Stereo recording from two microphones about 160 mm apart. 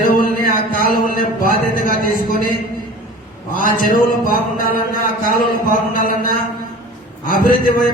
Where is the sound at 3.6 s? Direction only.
60° left (ahead or behind).